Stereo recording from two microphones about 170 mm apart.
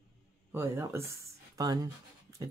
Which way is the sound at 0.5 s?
15° right (ahead or behind).